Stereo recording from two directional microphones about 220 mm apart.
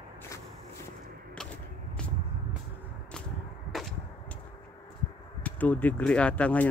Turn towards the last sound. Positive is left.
turn(degrees=5)  # may be behind; listen again after turning